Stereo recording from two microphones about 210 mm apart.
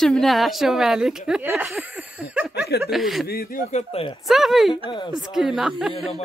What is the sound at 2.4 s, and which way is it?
Chuckle, 5° right (ahead or behind).